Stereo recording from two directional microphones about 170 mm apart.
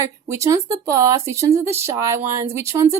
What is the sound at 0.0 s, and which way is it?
Speech, 15° right (ahead or behind).